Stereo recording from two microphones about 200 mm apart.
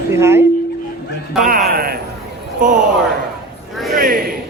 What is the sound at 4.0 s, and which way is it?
Speech, 45° right (ahead or behind).